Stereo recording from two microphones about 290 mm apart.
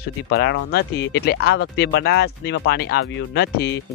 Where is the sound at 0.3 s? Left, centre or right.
Left.